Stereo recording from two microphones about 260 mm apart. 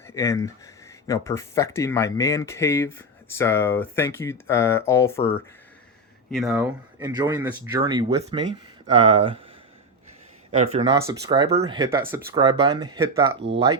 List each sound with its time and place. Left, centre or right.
0.1 s speech: centre
6.3 s speech: centre
7.0 s speech: centre
10.5 s speech: right